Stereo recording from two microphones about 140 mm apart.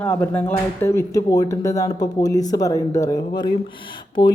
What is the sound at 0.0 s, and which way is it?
Speech, 15° left (ahead or behind).